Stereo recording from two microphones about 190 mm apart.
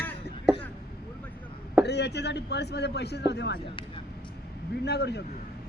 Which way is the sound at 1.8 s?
65° left (ahead or behind).